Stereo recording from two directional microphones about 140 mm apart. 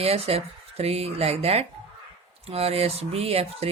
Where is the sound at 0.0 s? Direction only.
45° right (ahead or behind).